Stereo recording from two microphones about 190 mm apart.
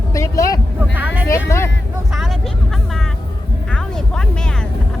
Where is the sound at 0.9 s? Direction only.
10° right (ahead or behind).